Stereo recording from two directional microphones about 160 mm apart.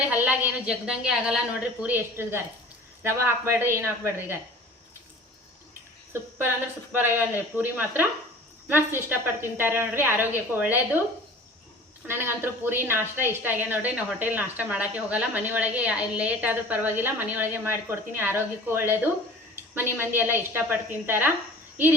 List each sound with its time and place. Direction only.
0.1 s a woman's voice: 10° right (ahead or behind)
6.9 s a woman's voice: 10° right (ahead or behind)
12.0 s a woman's voice: 15° right (ahead or behind)